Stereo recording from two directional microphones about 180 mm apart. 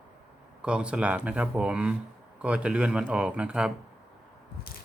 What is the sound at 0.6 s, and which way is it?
Speech, 5° right (ahead or behind).